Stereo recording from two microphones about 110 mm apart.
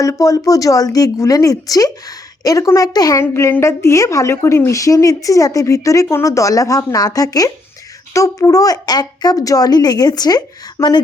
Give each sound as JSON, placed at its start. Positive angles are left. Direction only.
{"t": 0.0, "sound": "a woman's voice", "side_deg": 30}